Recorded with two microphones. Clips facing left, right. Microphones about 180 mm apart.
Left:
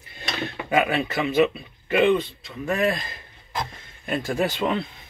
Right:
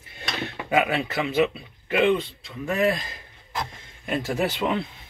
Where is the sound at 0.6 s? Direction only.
10° right (ahead or behind).